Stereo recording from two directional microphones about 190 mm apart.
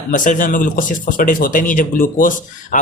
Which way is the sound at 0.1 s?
45° left (ahead or behind).